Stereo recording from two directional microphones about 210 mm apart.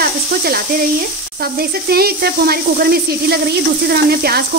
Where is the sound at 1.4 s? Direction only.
45° right (ahead or behind).